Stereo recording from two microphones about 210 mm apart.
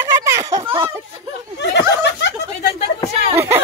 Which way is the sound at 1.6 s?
55° left (ahead or behind).